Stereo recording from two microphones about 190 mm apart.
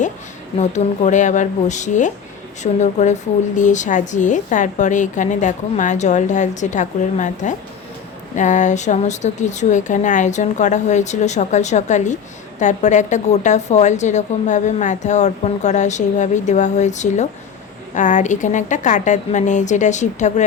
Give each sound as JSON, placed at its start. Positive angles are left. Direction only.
{"t": 0.6, "sound": "speech", "side_deg": 40}